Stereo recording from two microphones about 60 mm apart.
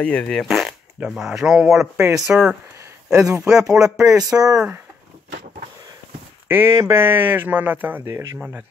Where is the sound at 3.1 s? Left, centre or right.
Right.